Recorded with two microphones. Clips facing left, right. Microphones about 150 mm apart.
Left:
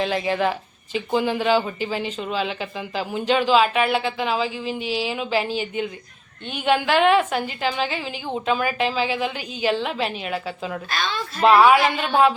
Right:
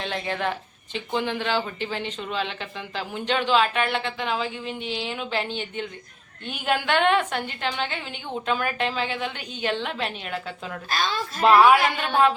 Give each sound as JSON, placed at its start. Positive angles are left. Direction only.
{"t": 0.0, "sound": "a woman's voice", "side_deg": 5}
{"t": 10.8, "sound": "a child's voice", "side_deg": -40}
{"t": 11.4, "sound": "speech", "side_deg": 5}